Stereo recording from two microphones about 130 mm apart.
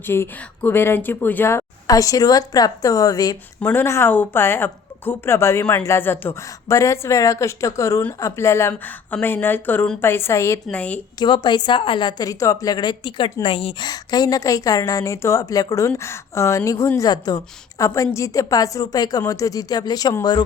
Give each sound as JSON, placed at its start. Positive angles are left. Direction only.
{"t": 0.0, "sound": "a woman's voice", "side_deg": 15}
{"t": 3.6, "sound": "a woman's voice", "side_deg": 15}
{"t": 10.7, "sound": "speech", "side_deg": 10}
{"t": 11.2, "sound": "a woman's voice", "side_deg": 35}